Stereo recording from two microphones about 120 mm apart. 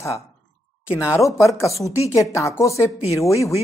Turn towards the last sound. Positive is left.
turn(degrees=25)  # may be behind; listen again after turning